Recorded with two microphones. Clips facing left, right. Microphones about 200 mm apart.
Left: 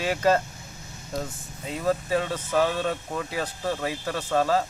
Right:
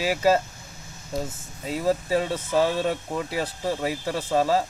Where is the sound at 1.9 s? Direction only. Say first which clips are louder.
Right 1 dB; 30° right (ahead or behind).